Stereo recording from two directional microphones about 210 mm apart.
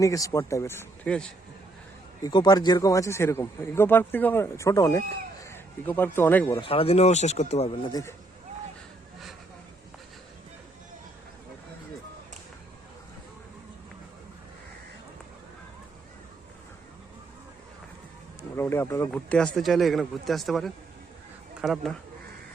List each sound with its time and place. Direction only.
0.0 s a man's voice: 15° left (ahead or behind)
2.2 s a man's voice: 20° left (ahead or behind)
6.6 s speech: 25° left (ahead or behind)
18.5 s a man's voice: 10° left (ahead or behind)
19.1 s speech: 5° left (ahead or behind)